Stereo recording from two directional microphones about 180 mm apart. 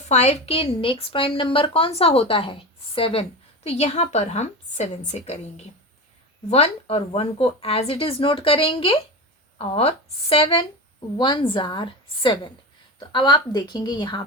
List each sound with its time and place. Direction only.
0.1 s a woman's voice: 40° left (ahead or behind)